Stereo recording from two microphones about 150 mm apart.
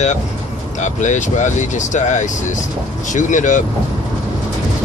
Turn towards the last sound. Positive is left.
turn(degrees=55)  # may be behind; listen again after turning